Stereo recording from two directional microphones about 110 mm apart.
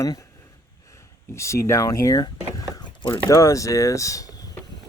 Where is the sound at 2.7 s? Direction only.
40° left (ahead or behind).